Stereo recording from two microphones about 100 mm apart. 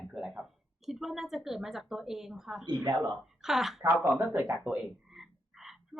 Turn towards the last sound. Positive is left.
turn(degrees=-5)  # may be behind; listen again after turning